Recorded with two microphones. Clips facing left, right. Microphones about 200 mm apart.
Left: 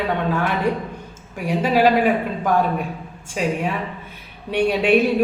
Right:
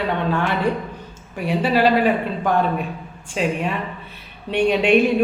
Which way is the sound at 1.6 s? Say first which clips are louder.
Left 1 dB; 10° left (ahead or behind).